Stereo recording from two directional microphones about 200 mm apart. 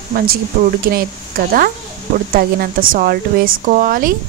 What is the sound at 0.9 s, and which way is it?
Speech, 45° right (ahead or behind).